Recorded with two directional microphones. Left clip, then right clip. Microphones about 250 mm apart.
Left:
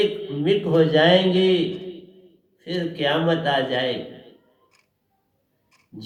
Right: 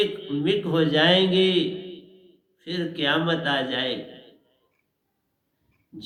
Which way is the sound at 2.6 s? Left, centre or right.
Right.